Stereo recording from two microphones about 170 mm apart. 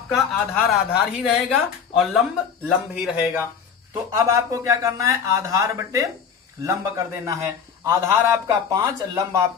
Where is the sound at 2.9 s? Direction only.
5° right (ahead or behind).